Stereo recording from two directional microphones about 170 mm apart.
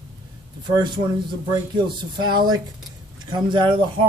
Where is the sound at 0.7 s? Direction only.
25° right (ahead or behind).